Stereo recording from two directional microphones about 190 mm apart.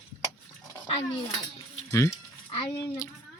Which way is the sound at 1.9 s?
15° left (ahead or behind).